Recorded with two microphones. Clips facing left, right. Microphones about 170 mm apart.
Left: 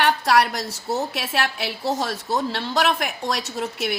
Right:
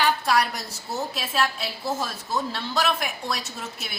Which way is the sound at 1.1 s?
70° left (ahead or behind).